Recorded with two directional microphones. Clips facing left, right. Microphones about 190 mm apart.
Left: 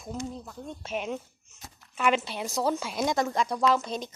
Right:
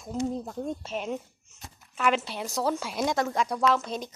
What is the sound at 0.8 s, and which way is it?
A woman's voice, centre (ahead or behind).